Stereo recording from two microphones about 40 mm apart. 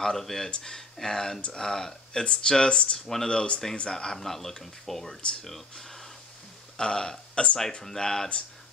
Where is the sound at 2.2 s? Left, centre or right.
Left.